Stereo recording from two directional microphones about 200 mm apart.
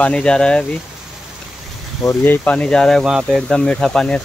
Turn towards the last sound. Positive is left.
turn(degrees=5)  # may be behind; listen again after turning